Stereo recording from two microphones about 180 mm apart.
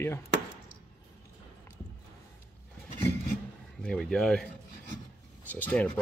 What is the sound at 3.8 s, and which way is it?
Speech, 5° left (ahead or behind).